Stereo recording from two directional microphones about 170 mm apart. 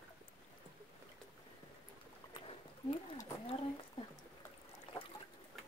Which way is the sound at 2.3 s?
30° left (ahead or behind).